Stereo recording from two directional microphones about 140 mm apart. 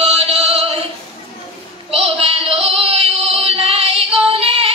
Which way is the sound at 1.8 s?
45° right (ahead or behind).